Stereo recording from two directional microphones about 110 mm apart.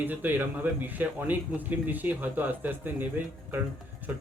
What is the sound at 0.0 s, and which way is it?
A man's voice, 15° right (ahead or behind).